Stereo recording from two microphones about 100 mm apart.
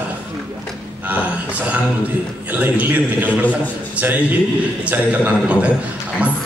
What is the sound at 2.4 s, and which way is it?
A man's voice, 15° right (ahead or behind).